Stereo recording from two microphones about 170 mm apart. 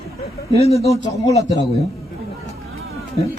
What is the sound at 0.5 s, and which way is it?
Speech, 35° left (ahead or behind).